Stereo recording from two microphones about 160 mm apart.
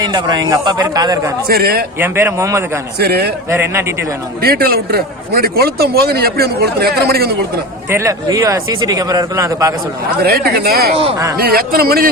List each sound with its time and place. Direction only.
0.0 s speech: 25° right (ahead or behind)
1.5 s a man's voice: 70° right (ahead or behind)
2.0 s a man's voice: 15° right (ahead or behind)
3.0 s a man's voice: 80° right
3.5 s a man's voice: 15° right (ahead or behind)
4.4 s a man's voice: 70° right (ahead or behind)
7.9 s speech: 20° right (ahead or behind)
10.2 s a man's voice: 70° right (ahead or behind)